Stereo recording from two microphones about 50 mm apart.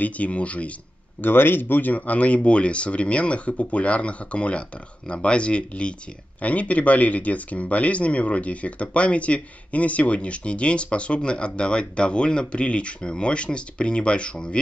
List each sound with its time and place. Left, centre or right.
0.0 s speech: left
1.2 s speech: left; by 14.6 s centre